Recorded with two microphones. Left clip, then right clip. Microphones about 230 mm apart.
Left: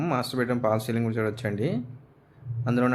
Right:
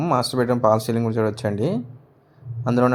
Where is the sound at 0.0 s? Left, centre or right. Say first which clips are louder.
Right 7 dB; centre.